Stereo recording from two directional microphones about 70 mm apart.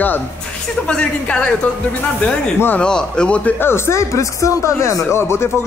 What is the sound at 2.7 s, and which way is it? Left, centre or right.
Speech, centre.